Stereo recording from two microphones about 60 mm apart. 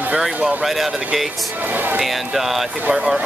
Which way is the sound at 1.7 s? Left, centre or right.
Right.